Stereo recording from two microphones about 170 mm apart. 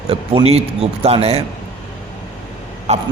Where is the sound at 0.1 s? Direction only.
35° right (ahead or behind).